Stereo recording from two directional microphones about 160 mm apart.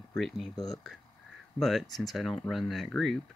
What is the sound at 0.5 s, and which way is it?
Speech, 25° left (ahead or behind).